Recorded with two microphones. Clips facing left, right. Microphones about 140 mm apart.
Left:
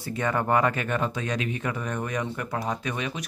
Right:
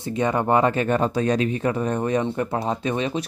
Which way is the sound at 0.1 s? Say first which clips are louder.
Right 4 dB; 20° right (ahead or behind).